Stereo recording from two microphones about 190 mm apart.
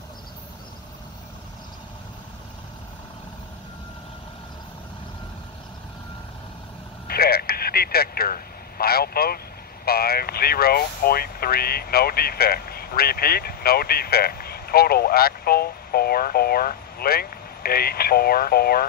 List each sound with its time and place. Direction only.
7.1 s speech: 55° left (ahead or behind)